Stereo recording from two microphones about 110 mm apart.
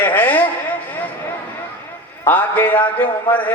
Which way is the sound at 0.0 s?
15° left (ahead or behind).